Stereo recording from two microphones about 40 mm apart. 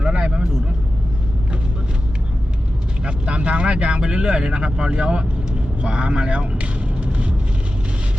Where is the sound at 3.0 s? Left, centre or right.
Right.